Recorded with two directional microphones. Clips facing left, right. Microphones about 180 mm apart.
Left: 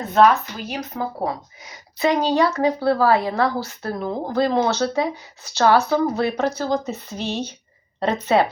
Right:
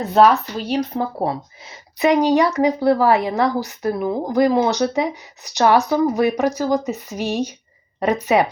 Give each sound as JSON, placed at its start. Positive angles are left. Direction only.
{"t": 0.1, "sound": "speech", "side_deg": -35}